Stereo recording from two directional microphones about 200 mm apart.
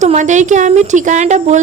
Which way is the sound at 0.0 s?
35° right (ahead or behind).